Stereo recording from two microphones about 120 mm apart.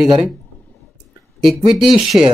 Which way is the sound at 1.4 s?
Centre (ahead or behind).